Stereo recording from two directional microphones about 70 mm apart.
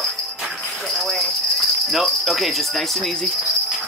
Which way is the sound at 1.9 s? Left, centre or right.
Centre.